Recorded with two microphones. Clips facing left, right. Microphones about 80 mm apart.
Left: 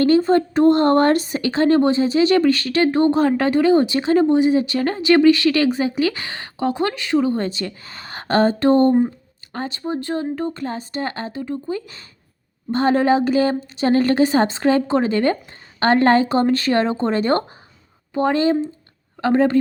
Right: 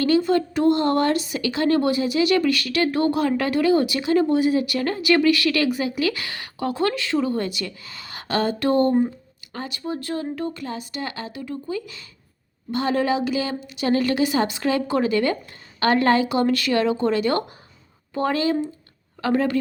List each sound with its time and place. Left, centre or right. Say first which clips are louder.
0.0 s a woman's voice: left 4 dB; left
4.4 s a woman's voice: left 4 dB; left
18.1 s speech: left 4 dB; left